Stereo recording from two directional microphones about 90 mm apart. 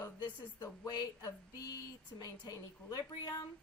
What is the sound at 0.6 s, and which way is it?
Speech, 45° left (ahead or behind).